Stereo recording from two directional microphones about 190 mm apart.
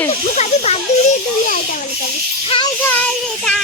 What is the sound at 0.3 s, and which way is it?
Speech, 35° left (ahead or behind).